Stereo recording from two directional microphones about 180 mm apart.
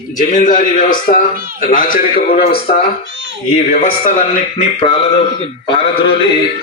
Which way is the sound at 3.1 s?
85° right.